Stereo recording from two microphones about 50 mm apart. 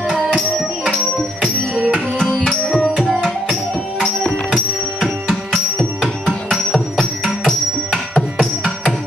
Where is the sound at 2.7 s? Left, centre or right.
Centre.